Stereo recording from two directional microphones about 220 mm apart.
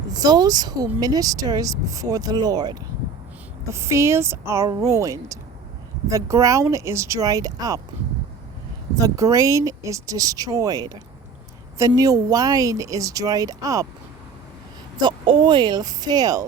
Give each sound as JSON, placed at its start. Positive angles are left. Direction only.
{"t": 0.1, "sound": "speech", "side_deg": -15}
{"t": 9.0, "sound": "speech", "side_deg": -15}
{"t": 15.0, "sound": "speech", "side_deg": -25}